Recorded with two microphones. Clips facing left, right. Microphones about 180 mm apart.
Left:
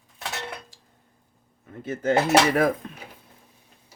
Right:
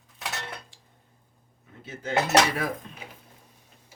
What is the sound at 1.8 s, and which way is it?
Speech, 50° left (ahead or behind).